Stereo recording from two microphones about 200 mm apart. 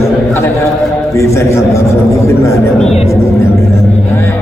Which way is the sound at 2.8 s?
30° left (ahead or behind).